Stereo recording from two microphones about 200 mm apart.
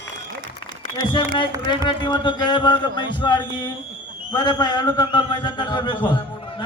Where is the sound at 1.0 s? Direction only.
25° left (ahead or behind).